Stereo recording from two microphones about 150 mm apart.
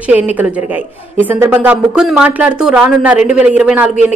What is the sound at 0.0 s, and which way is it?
A woman's voice, 10° right (ahead or behind).